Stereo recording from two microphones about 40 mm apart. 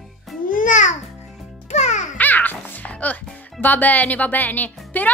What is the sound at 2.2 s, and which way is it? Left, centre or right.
A woman's voice, left.